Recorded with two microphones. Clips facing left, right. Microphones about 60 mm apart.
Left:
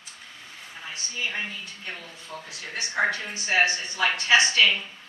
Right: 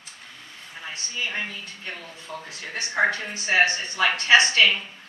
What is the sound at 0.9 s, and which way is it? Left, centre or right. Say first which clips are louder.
A woman's voice: right 1 dB; right.